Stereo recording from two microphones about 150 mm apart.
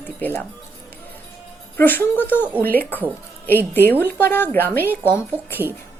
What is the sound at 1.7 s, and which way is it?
A woman's voice, 15° left (ahead or behind).